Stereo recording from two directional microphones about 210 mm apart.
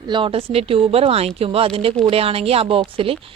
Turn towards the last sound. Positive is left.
turn(degrees=-25)  # may be behind; listen again after turning